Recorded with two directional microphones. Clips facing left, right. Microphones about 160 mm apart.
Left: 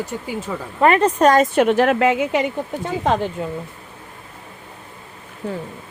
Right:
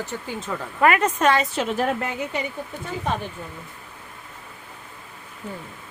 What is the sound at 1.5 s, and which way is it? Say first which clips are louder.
Speech: left 8 dB; 65° left (ahead or behind).